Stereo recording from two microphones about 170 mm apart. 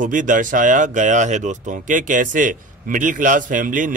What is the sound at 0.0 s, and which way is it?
Speech, 50° right (ahead or behind).